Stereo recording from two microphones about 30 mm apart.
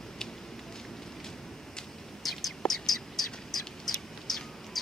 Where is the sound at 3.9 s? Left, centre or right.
Centre.